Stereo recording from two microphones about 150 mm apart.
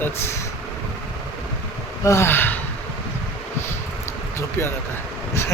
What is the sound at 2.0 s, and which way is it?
Speech, 15° left (ahead or behind).